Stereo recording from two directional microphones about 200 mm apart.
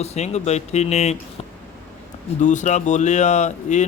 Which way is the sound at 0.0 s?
35° left (ahead or behind).